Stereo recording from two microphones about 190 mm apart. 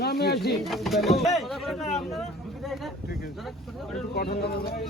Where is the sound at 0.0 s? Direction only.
55° left (ahead or behind).